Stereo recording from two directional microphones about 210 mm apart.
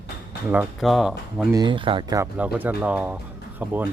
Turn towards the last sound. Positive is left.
turn(degrees=-10)  # may be behind; listen again after turning